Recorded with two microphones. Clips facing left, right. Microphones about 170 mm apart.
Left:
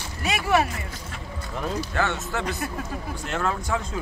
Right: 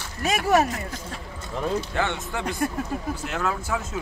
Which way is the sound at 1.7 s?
15° right (ahead or behind).